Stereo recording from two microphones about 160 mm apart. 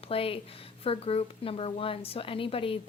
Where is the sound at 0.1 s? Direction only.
35° left (ahead or behind).